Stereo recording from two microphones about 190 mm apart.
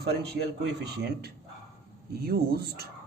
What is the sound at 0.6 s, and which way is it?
Speech, 60° right (ahead or behind).